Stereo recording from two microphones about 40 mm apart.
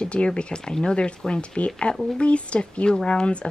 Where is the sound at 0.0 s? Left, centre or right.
Left.